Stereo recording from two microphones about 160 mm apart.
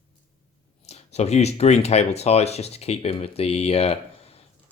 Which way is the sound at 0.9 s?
40° left (ahead or behind).